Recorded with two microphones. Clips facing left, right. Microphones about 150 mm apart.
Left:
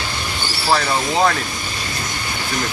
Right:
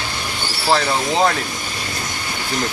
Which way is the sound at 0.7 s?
20° right (ahead or behind).